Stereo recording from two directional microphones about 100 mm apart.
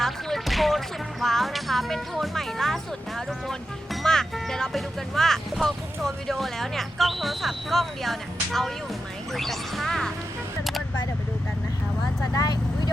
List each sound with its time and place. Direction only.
0.0 s music: 5° left (ahead or behind)
1.2 s speech: centre (ahead or behind)
10.6 s single-lens reflex camera: centre (ahead or behind)
12.3 s speech: 40° left (ahead or behind)